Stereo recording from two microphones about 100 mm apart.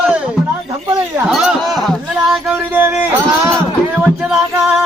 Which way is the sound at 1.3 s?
5° right (ahead or behind).